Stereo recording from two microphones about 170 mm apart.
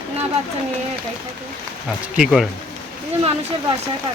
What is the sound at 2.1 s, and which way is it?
Speech, 5° right (ahead or behind).